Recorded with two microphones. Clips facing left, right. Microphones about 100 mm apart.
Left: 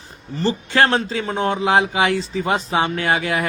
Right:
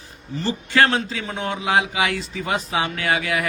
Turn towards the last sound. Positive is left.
turn(degrees=30)  # may be behind; listen again after turning